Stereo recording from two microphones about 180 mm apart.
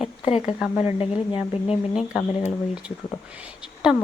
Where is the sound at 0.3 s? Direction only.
30° left (ahead or behind).